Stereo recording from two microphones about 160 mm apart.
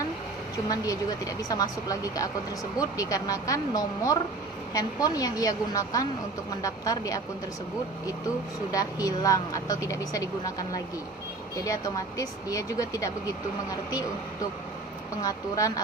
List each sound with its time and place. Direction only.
0.7 s speech: 20° left (ahead or behind)
8.7 s speech: 20° left (ahead or behind)
15.2 s speech: 20° left (ahead or behind)